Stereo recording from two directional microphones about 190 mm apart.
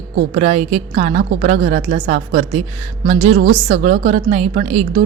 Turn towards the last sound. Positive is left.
turn(degrees=-35)  # may be behind; listen again after turning